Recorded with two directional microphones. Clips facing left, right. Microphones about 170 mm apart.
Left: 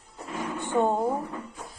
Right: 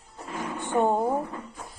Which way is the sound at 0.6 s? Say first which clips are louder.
Right 1 dB; 15° right (ahead or behind).